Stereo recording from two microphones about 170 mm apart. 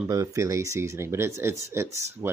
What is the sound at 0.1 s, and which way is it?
Speech, 20° right (ahead or behind).